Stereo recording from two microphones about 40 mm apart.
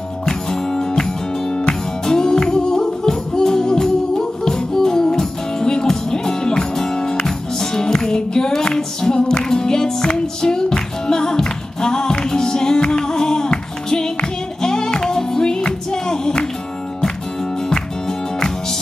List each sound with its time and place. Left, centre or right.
0.2 s music: centre